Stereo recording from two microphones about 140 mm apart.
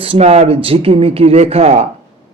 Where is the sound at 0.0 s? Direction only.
45° right (ahead or behind).